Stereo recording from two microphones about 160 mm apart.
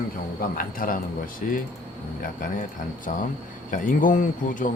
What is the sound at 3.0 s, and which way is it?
Speech, 60° left (ahead or behind).